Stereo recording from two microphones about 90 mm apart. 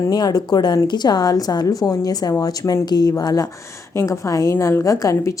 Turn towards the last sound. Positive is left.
turn(degrees=40)  # may be behind; listen again after turning